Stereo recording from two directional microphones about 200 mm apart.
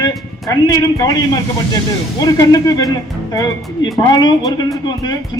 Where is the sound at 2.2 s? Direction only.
20° left (ahead or behind).